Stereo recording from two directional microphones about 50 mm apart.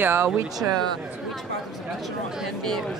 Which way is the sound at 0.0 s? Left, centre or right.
Right.